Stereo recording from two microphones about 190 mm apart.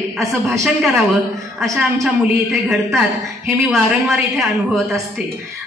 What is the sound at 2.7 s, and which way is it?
A woman's voice, 5° right (ahead or behind).